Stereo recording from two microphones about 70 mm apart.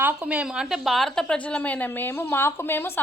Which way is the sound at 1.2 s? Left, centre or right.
Centre.